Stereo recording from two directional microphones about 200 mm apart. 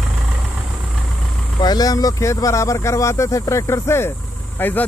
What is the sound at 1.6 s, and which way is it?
Speech, 20° left (ahead or behind).